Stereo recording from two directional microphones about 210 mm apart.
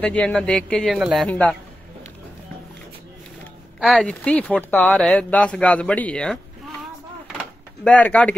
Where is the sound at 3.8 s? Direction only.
Centre (ahead or behind).